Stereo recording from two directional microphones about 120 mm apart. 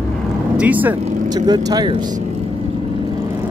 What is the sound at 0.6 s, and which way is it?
Speech, 15° right (ahead or behind).